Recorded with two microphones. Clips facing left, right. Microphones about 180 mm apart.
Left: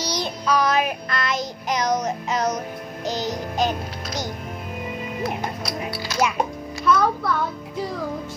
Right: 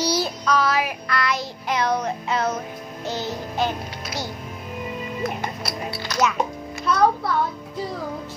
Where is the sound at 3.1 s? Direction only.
15° left (ahead or behind).